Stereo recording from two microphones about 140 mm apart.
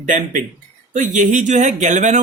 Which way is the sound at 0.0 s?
65° right (ahead or behind).